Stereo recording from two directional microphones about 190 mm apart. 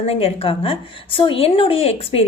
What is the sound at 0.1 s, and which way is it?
A woman's voice, 30° left (ahead or behind).